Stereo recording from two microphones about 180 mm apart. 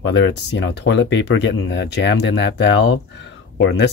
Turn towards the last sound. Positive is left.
turn(degrees=75)  # may be behind; listen again after turning